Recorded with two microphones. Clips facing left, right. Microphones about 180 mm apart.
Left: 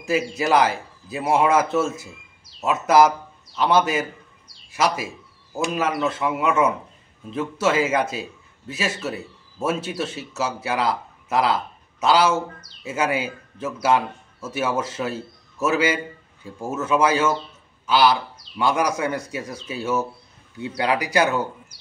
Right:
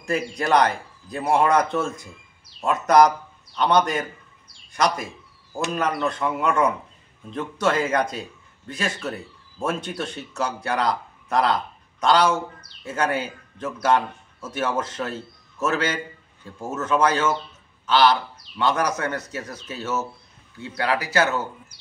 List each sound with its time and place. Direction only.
0.0 s a man's voice: 5° left (ahead or behind)